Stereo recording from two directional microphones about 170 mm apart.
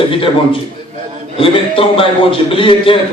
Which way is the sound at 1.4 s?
30° left (ahead or behind).